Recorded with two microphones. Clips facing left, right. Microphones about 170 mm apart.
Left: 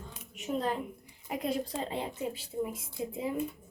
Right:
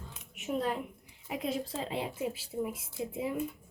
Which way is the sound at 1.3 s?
Centre (ahead or behind).